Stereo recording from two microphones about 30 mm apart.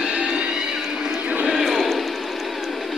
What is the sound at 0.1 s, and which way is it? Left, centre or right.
Music, right.